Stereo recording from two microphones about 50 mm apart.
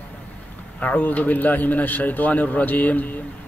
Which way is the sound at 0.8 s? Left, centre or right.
Left.